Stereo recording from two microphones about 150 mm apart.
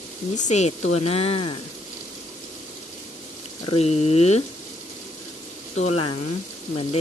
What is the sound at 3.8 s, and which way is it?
Speech, 45° left (ahead or behind).